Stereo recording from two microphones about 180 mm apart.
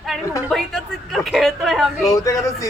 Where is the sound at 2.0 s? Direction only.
20° left (ahead or behind).